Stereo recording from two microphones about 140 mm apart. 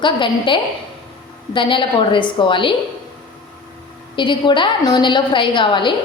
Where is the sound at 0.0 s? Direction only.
35° left (ahead or behind).